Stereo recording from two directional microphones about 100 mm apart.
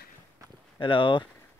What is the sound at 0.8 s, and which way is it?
Speech, 55° left (ahead or behind).